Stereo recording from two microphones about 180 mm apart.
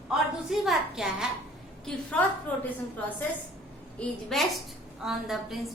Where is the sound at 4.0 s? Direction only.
Centre (ahead or behind).